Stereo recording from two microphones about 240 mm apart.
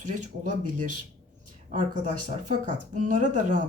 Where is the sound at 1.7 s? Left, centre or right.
Right.